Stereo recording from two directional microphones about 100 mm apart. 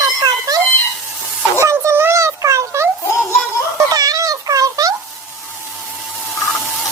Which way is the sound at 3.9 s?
40° right (ahead or behind).